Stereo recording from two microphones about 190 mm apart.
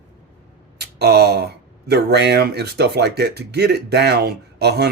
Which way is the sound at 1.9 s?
60° right (ahead or behind).